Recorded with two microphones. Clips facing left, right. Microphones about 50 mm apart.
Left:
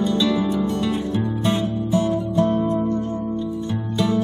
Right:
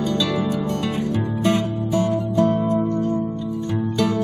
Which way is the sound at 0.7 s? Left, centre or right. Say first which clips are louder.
Left 1 dB; right.